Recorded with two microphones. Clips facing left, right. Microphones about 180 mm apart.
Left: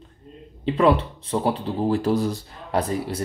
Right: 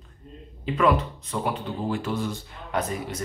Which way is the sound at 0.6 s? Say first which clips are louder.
Left 4 dB; 30° left (ahead or behind).